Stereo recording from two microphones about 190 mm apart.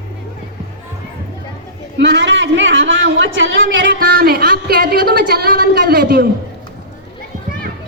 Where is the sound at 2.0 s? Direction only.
70° right (ahead or behind).